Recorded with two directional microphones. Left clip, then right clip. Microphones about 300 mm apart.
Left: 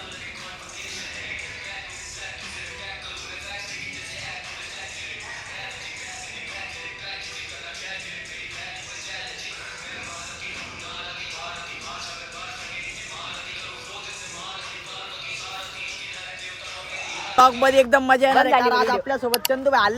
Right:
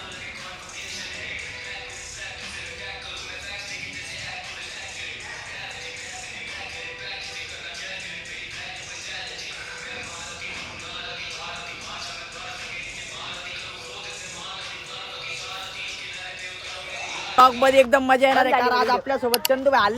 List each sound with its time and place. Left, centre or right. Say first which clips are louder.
17.1 s a man's voice: even; centre